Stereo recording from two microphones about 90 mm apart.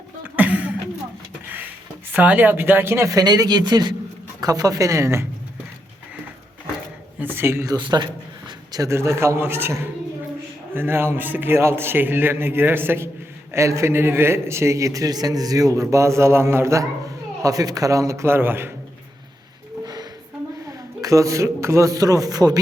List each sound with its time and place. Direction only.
0.3 s a sound: 15° right (ahead or behind)
2.1 s a man's voice: 15° right (ahead or behind)
3.1 s speech: 45° right (ahead or behind)
4.4 s a man's voice: 45° right (ahead or behind)
7.2 s a man's voice: 25° right (ahead or behind)
7.8 s a sound: 55° right (ahead or behind)
8.9 s a man's voice: 30° right (ahead or behind)
17.4 s a man's voice: 40° right (ahead or behind); by 18.7 s 25° right (ahead or behind)
19.8 s music: 50° right (ahead or behind)
20.7 s a man's voice: 40° right (ahead or behind)